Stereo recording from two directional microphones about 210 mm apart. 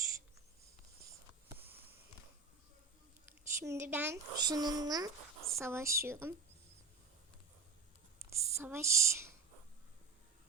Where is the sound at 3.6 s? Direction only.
10° right (ahead or behind).